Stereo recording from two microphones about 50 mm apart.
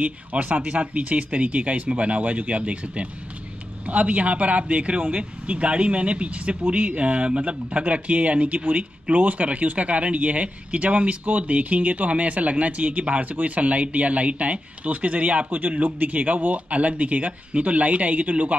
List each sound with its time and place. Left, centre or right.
0.0 s a man's voice: right